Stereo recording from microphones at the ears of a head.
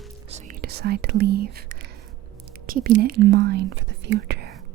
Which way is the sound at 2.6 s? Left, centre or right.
Right.